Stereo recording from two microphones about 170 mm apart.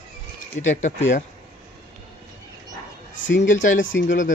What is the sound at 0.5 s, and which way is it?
Speech, 45° left (ahead or behind).